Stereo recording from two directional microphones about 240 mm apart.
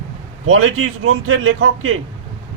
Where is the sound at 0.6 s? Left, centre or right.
Right.